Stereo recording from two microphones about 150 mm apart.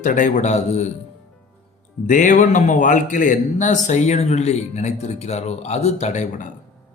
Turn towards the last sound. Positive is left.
turn(degrees=55)  # may be behind; listen again after turning